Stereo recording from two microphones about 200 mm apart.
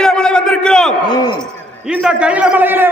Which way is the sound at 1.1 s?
20° left (ahead or behind).